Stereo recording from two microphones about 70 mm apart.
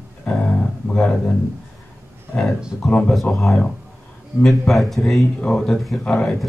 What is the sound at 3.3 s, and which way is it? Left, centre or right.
Speech, centre.